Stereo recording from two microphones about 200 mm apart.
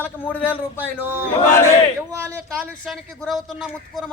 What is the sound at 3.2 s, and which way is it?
Speech, centre (ahead or behind).